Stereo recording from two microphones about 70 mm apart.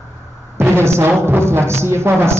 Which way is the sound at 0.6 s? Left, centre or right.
Right.